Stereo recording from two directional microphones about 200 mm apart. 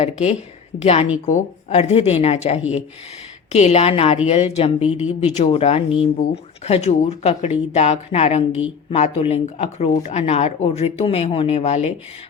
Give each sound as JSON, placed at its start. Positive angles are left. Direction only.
{"t": 0.0, "sound": "speech", "side_deg": 35}
{"t": 4.8, "sound": "speech", "side_deg": -5}
{"t": 5.2, "sound": "speech", "side_deg": 35}